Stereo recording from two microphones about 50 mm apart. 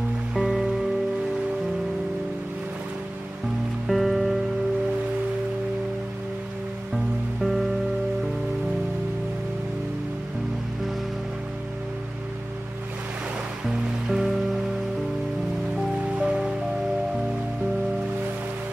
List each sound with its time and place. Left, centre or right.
0.3 s music: centre
3.8 s music: centre
14.0 s music: centre
16.2 s music: centre